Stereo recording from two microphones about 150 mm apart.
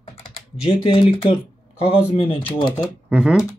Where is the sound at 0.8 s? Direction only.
35° left (ahead or behind).